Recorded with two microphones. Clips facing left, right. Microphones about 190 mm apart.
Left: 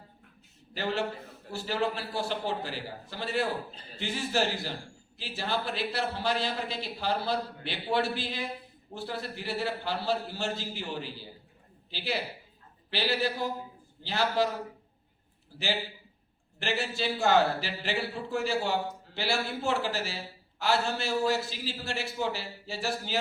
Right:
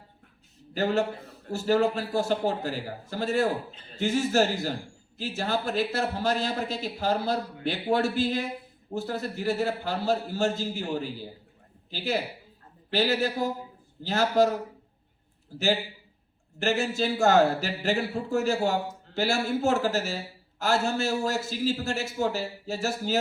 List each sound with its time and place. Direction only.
0.7 s a man's voice: 45° right (ahead or behind)
15.5 s a man's voice: 45° right (ahead or behind)